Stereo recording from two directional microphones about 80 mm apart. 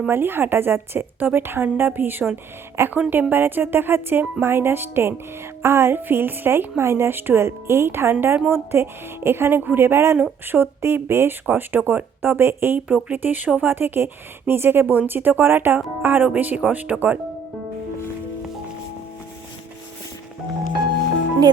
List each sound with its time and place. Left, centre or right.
0.1 s a woman's voice: right